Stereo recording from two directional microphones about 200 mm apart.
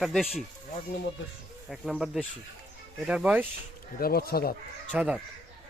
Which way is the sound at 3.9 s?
50° left (ahead or behind).